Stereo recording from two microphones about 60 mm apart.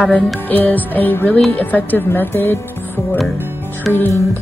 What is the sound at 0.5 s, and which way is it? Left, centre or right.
Music, left.